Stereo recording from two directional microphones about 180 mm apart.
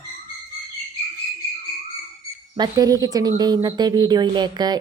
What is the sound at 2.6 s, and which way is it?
Speech, 20° right (ahead or behind).